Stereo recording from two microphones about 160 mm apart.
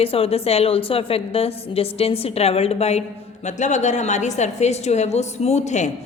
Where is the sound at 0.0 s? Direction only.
35° left (ahead or behind).